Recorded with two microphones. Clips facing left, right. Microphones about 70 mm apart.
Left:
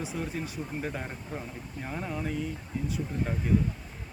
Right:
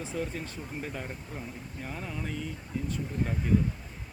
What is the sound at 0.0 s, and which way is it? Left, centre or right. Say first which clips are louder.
Speech: left 1 dB; centre.